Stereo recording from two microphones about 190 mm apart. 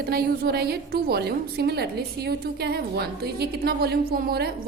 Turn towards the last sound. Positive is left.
turn(degrees=-55)  # may be behind; listen again after turning